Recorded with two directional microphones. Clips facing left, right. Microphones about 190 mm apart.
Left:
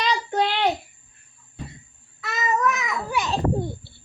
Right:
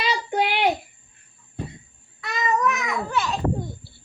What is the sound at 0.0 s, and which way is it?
Child singing, 10° right (ahead or behind).